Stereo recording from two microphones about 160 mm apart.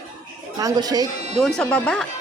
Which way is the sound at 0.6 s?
25° right (ahead or behind).